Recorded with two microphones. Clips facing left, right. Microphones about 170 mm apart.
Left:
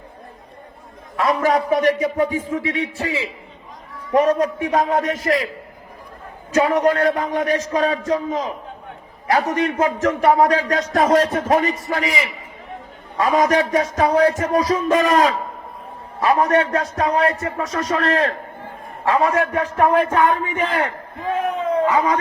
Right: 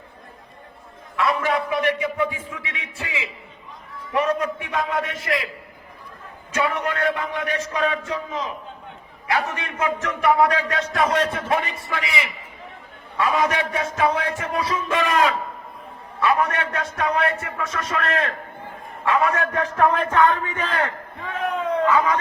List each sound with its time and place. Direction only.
1.1 s a man's voice: 40° left (ahead or behind)
6.5 s a man's voice: 35° left (ahead or behind)
19.5 s a man's voice: 15° left (ahead or behind)